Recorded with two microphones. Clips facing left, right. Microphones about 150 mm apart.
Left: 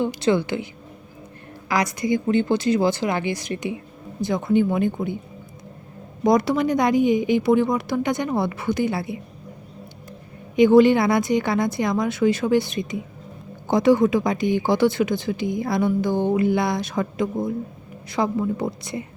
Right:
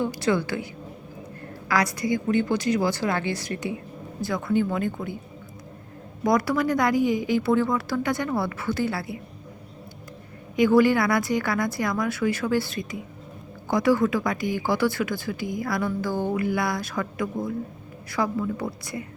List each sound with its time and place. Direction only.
0.0 s speech: 20° left (ahead or behind)
6.2 s speech: 20° left (ahead or behind)
10.5 s speech: 20° left (ahead or behind)